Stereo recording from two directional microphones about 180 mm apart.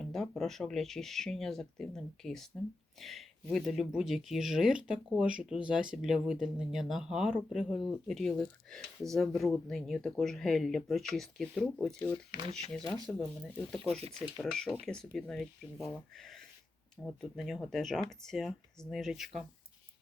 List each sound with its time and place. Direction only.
0.0 s speech: centre (ahead or behind)